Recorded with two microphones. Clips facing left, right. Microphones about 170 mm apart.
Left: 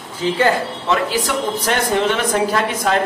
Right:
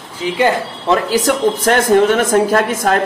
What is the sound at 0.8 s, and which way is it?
A man's voice, 45° right (ahead or behind).